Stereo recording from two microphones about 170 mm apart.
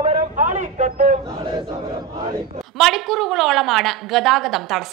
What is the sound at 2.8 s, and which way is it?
A woman's voice, centre (ahead or behind).